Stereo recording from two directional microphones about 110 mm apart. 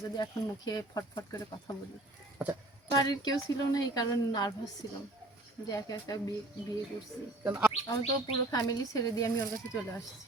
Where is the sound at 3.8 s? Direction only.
35° left (ahead or behind).